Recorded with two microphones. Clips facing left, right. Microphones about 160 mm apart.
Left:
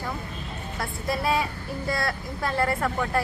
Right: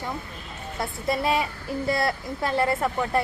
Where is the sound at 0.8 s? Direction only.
25° right (ahead or behind).